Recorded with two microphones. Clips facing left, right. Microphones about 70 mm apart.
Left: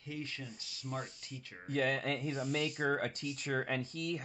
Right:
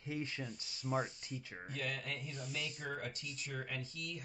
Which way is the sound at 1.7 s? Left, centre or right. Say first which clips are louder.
Left 10 dB; left.